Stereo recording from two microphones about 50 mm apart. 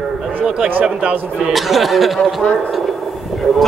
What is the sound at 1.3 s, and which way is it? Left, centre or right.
Speech, centre.